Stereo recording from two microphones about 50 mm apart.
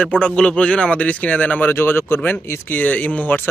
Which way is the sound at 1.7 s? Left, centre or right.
Left.